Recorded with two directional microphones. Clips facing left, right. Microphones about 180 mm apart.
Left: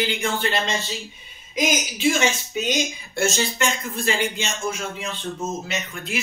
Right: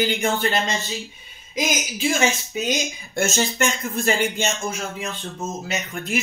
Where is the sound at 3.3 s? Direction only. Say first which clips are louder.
Right 2 dB; 45° right (ahead or behind).